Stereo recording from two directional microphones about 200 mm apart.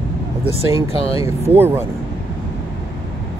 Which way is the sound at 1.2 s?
10° right (ahead or behind).